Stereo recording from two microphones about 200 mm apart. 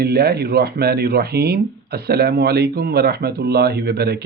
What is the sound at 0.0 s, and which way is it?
Speech, 50° right (ahead or behind).